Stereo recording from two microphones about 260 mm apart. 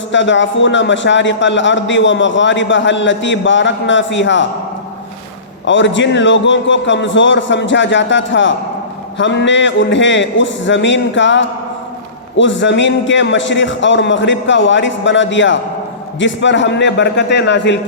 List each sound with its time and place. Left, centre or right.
0.1 s a man's voice: left
5.6 s a man's voice: left